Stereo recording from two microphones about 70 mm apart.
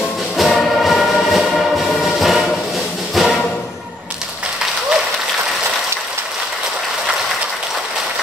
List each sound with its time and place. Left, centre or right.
0.4 s music: centre